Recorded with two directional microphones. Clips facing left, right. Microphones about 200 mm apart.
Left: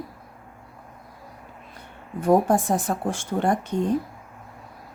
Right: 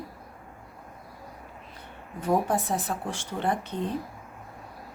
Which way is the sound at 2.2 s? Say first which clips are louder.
Left 6 dB; 50° left (ahead or behind).